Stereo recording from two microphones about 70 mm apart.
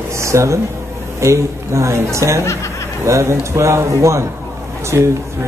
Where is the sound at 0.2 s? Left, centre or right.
Right.